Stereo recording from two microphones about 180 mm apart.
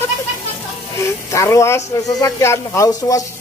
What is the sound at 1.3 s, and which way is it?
A man's voice, 15° left (ahead or behind).